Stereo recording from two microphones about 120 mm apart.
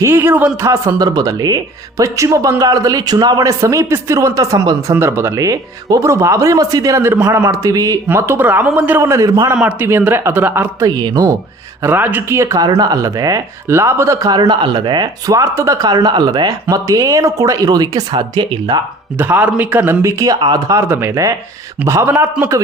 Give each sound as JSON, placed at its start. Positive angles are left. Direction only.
{"t": 0.0, "sound": "speech", "side_deg": -20}
{"t": 9.0, "sound": "speech", "side_deg": -25}
{"t": 9.6, "sound": "speech", "side_deg": -10}
{"t": 10.8, "sound": "speech", "side_deg": -35}
{"t": 11.8, "sound": "speech", "side_deg": -15}
{"t": 19.1, "sound": "speech", "side_deg": -15}
{"t": 20.0, "sound": "speech", "side_deg": -25}